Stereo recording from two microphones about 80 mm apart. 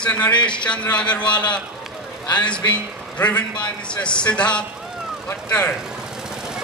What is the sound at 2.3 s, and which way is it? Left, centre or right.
A man's voice, centre.